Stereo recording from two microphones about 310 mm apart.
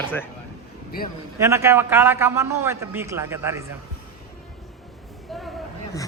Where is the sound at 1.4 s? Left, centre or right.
Centre.